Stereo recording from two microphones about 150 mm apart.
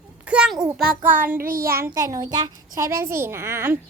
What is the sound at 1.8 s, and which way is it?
A child's voice, 20° right (ahead or behind).